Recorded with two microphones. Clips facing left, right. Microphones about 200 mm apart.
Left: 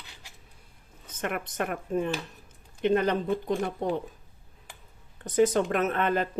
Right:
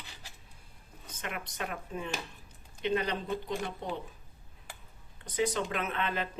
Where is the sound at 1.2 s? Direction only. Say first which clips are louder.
Left 8 dB; 55° left (ahead or behind).